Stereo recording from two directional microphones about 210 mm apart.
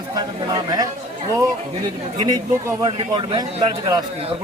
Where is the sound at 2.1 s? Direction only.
20° right (ahead or behind).